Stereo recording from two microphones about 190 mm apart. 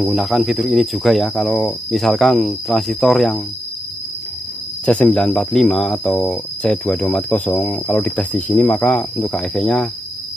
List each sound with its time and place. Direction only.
0.0 s speech: centre (ahead or behind)
4.8 s speech: 5° left (ahead or behind)